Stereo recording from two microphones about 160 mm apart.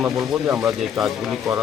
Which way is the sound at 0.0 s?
5° right (ahead or behind).